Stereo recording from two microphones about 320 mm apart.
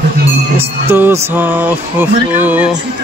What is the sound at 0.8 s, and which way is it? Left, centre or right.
Music, centre.